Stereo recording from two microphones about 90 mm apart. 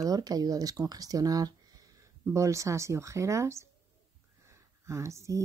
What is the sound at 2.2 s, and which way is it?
Speech, 35° right (ahead or behind).